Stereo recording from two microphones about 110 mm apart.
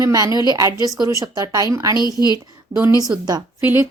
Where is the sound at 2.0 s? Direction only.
40° left (ahead or behind).